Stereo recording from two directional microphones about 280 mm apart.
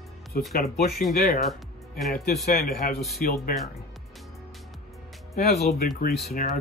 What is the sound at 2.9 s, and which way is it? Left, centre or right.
Speech, centre.